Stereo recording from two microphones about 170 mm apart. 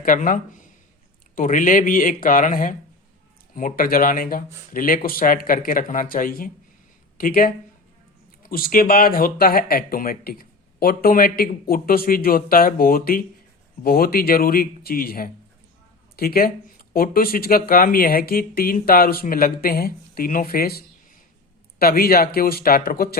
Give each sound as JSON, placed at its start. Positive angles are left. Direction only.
{"t": 0.0, "sound": "speech", "side_deg": 50}